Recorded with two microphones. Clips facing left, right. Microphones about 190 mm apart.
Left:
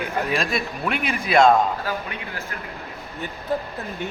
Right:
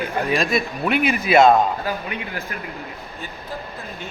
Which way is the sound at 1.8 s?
15° right (ahead or behind).